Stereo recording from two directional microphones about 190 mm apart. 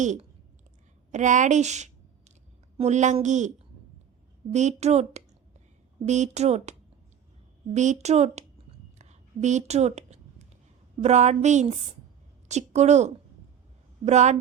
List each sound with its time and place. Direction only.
0.0 s a woman's voice: 40° right (ahead or behind)
4.5 s speech: 35° right (ahead or behind)
9.0 s a sound: 35° right (ahead or behind)
11.0 s speech: 35° right (ahead or behind)